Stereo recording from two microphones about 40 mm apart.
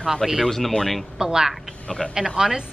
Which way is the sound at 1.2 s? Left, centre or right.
Centre.